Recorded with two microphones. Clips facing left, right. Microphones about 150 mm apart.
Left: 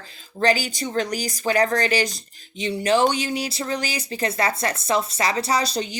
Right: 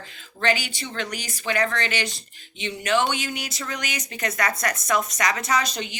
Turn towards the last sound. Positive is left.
turn(degrees=35)  # may be behind; listen again after turning